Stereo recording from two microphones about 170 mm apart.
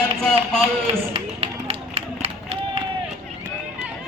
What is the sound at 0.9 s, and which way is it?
Run, 35° right (ahead or behind).